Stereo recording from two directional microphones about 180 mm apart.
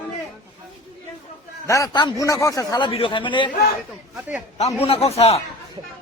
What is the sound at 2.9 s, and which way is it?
Speech, 30° left (ahead or behind).